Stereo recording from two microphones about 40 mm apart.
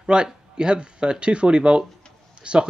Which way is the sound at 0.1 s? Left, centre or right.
Right.